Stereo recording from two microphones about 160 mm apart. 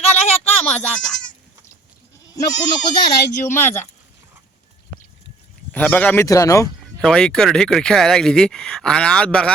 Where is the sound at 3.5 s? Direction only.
15° left (ahead or behind).